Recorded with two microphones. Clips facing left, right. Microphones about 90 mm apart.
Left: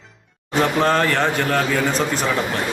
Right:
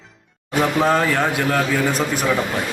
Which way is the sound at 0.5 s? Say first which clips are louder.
Even; 5° right (ahead or behind).